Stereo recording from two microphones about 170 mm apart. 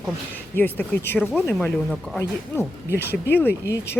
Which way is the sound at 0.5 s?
10° left (ahead or behind).